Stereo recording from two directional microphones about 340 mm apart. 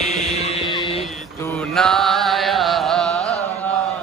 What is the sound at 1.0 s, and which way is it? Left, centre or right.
Mantra, centre.